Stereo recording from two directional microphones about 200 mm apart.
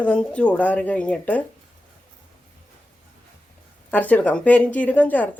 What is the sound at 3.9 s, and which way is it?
A woman's voice, 10° left (ahead or behind).